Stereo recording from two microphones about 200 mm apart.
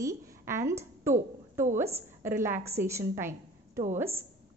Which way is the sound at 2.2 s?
10° right (ahead or behind).